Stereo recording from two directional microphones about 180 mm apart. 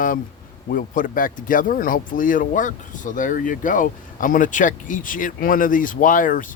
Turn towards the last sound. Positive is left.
turn(degrees=50)  # may be behind; listen again after turning